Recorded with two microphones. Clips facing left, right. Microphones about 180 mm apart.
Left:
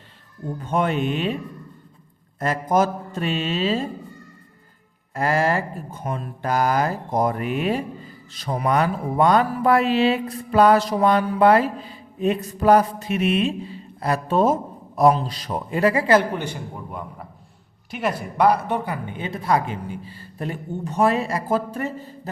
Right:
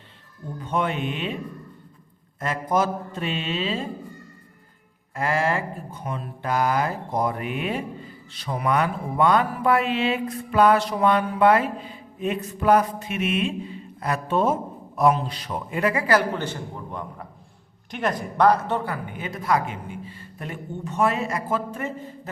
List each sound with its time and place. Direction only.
0.6 s speech: 45° left (ahead or behind)
2.4 s speech: 40° left (ahead or behind)
5.1 s speech: 40° left (ahead or behind); by 16.4 s 25° left (ahead or behind)
16.4 s a man's voice: 10° left (ahead or behind); by 22.3 s 35° left (ahead or behind)